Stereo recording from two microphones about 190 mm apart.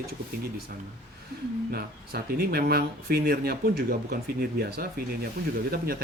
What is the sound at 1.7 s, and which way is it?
Speech, 50° right (ahead or behind).